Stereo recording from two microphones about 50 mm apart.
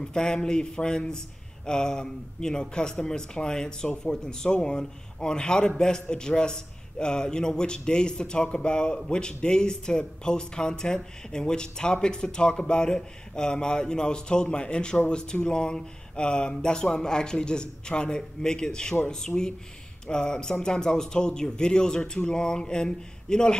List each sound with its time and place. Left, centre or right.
0.0 s speech: centre